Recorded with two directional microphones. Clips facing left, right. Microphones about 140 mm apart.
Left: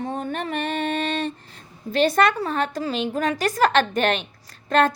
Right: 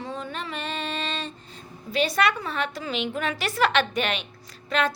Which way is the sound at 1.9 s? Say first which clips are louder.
Left 5 dB; 50° left (ahead or behind).